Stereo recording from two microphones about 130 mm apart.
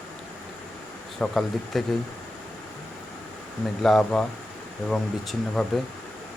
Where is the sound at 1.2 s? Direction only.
5° left (ahead or behind).